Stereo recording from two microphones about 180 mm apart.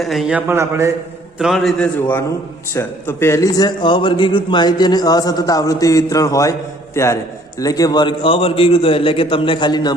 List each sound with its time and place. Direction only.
0.0 s a man's voice: centre (ahead or behind)
1.4 s a man's voice: centre (ahead or behind); by 9.9 s 25° left (ahead or behind)